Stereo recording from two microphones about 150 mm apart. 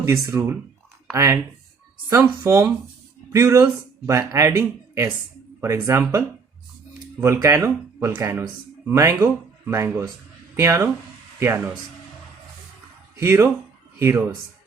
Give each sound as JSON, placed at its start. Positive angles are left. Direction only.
{"t": 0.0, "sound": "speech", "side_deg": -15}
{"t": 13.1, "sound": "speech", "side_deg": -15}